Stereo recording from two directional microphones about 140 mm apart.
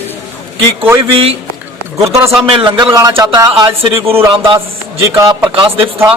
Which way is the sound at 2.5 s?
35° right (ahead or behind).